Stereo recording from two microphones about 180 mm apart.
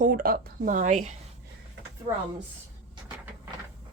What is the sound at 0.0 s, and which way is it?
Speech, 50° right (ahead or behind).